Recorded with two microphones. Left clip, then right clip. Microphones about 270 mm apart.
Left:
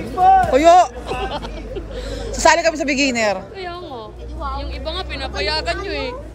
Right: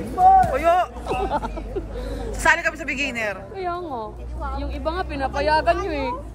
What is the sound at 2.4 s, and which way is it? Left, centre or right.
A woman's voice, centre.